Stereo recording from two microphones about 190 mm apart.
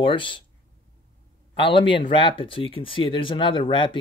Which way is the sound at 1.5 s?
25° left (ahead or behind).